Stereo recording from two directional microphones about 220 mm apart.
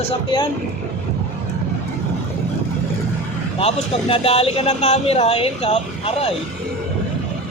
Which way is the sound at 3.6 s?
25° left (ahead or behind).